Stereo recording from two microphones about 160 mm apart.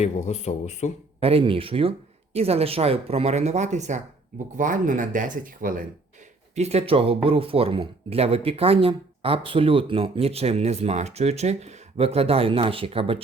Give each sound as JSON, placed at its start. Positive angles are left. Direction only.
{"t": 0.0, "sound": "speech", "side_deg": 45}
{"t": 1.2, "sound": "speech", "side_deg": -35}
{"t": 6.6, "sound": "speech", "side_deg": -40}